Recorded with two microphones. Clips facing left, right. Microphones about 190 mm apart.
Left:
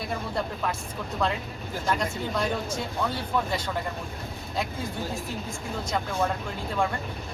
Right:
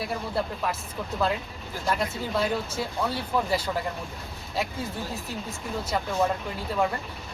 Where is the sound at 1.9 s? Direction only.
5° right (ahead or behind).